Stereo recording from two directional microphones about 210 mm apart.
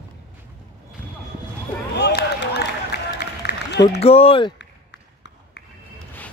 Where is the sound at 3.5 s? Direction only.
50° left (ahead or behind).